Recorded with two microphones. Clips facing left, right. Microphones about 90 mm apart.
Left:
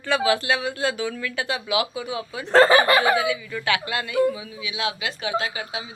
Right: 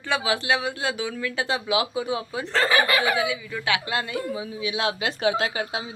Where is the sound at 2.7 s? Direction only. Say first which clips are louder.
Left 4 dB; 30° left (ahead or behind).